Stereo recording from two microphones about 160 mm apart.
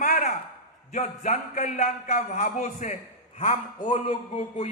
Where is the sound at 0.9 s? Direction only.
45° left (ahead or behind).